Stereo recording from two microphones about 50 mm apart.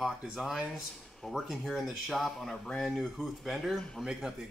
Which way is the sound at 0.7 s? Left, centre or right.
Centre.